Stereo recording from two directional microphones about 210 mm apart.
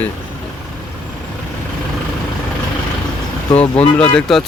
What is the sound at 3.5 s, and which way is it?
Speech, 30° left (ahead or behind).